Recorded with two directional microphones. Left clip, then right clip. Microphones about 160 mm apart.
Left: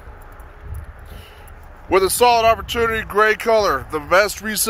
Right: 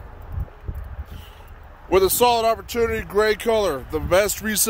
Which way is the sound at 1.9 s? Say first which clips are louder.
Left 3 dB; 20° right (ahead or behind).